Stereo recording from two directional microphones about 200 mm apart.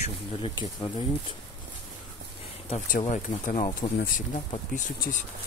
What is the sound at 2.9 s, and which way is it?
Speech, 40° left (ahead or behind).